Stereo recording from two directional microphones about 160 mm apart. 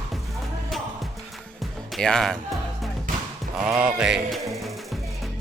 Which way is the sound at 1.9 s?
Centre (ahead or behind).